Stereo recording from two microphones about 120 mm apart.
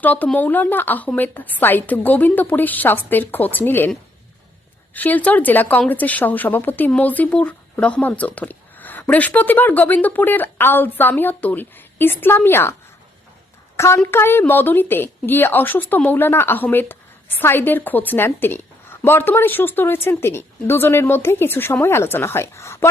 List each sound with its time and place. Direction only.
0.0 s a woman's voice: 15° left (ahead or behind)
4.9 s a woman's voice: 15° left (ahead or behind)
13.7 s a woman's voice: 20° left (ahead or behind)